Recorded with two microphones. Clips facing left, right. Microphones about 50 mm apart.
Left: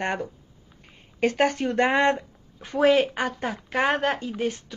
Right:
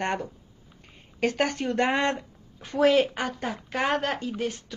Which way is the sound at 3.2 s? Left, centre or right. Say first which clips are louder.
Left 2 dB; left.